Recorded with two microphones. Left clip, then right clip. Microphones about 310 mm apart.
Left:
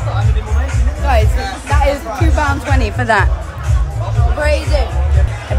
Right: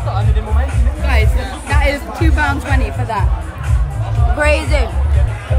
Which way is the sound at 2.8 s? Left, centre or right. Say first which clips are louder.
Left 7 dB; left.